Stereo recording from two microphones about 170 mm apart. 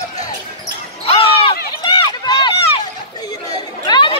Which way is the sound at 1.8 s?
25° left (ahead or behind).